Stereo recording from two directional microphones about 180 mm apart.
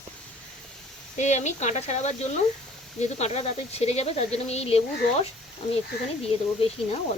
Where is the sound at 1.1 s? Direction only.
40° left (ahead or behind).